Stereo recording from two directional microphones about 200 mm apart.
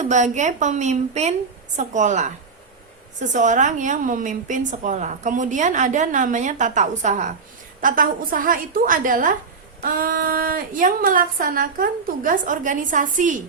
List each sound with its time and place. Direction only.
0.0 s a woman's voice: 35° right (ahead or behind)